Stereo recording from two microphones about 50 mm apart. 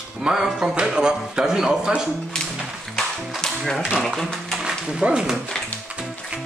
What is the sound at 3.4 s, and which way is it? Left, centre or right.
Typewriter, centre.